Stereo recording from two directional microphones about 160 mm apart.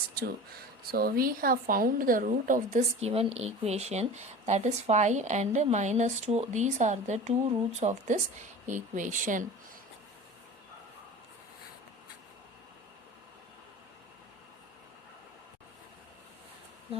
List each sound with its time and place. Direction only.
0.9 s a woman's voice: 70° right (ahead or behind); by 3.1 s 50° right (ahead or behind)
3.1 s speech: 40° right (ahead or behind); by 9.5 s 55° right (ahead or behind)